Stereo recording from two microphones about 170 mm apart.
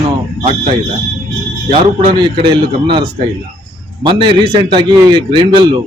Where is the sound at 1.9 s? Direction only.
30° right (ahead or behind).